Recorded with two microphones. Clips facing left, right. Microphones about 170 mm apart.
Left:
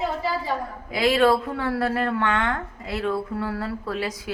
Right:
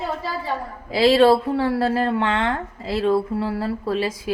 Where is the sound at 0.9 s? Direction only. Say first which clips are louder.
Right 5 dB; 30° right (ahead or behind).